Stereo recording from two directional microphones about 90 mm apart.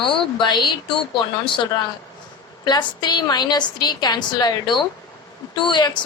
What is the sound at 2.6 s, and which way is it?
A woman's voice, 50° left (ahead or behind).